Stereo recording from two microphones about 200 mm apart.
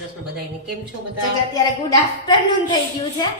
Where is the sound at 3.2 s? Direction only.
20° left (ahead or behind).